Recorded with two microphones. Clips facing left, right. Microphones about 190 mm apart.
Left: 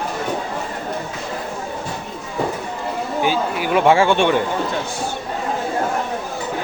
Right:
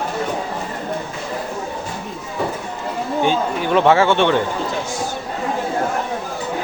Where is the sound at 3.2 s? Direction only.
10° left (ahead or behind).